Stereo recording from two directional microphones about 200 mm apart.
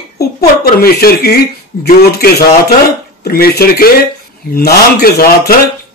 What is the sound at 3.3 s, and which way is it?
Speech, 50° left (ahead or behind).